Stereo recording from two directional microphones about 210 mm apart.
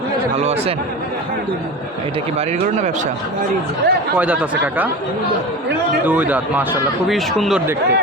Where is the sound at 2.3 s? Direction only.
30° right (ahead or behind).